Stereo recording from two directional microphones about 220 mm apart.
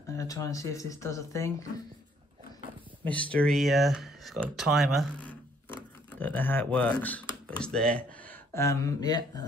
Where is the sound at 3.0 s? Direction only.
5° left (ahead or behind).